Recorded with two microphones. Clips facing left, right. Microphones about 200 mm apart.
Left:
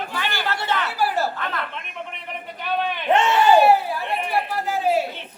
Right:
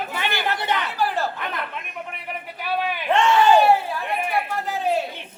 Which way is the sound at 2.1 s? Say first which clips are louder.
Right 1 dB; 10° right (ahead or behind).